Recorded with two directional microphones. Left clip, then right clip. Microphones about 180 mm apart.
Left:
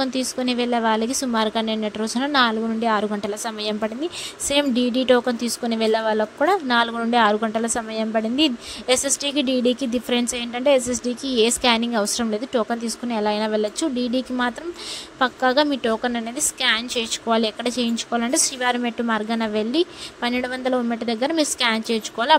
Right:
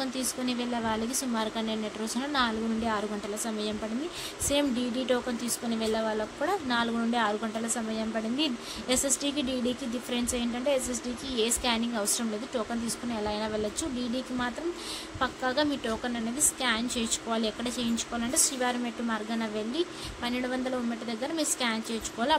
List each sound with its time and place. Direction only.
0.0 s a woman's voice: 45° left (ahead or behind)